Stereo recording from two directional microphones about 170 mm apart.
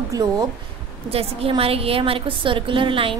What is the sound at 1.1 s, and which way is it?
A woman's voice, 35° right (ahead or behind).